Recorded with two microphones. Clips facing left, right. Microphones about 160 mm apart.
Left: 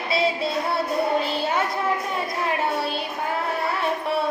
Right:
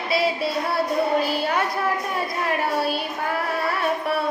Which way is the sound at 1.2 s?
25° left (ahead or behind).